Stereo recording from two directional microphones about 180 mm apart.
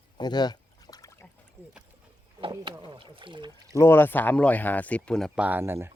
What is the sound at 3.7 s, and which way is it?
Speech, 15° left (ahead or behind).